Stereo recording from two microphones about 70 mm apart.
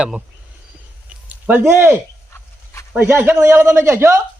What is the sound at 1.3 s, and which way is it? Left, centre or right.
Speech, right.